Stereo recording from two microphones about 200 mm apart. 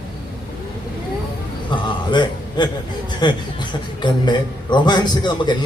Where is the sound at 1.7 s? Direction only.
25° left (ahead or behind).